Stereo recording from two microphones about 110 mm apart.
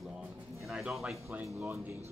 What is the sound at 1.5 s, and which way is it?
Speech, 30° right (ahead or behind).